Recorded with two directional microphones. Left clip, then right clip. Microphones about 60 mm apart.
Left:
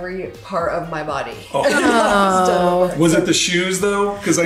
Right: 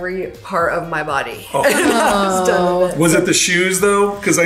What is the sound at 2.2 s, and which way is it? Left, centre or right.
Speech, left.